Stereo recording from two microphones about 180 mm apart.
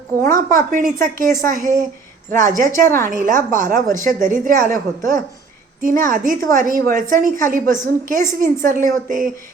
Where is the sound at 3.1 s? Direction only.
45° right (ahead or behind).